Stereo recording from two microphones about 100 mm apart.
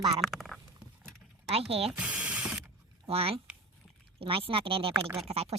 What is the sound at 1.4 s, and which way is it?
Speech, 80° right.